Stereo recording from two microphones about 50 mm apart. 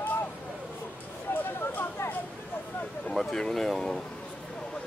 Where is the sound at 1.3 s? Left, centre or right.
Left.